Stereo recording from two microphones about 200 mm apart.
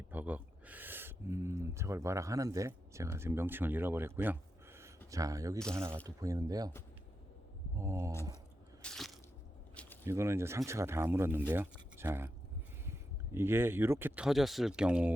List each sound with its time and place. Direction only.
0.1 s speech: 10° right (ahead or behind)
7.8 s speech: 15° right (ahead or behind)
8.8 s squish: centre (ahead or behind)
9.8 s a sound: 5° left (ahead or behind)
10.1 s speech: 15° right (ahead or behind)